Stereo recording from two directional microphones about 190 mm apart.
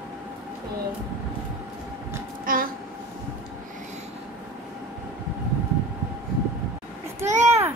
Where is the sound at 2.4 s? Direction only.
50° right (ahead or behind).